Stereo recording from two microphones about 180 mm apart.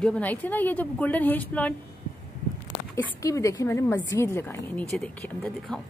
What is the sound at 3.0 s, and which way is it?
Speech, 15° left (ahead or behind).